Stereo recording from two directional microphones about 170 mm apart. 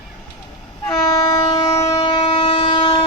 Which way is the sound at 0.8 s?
20° left (ahead or behind).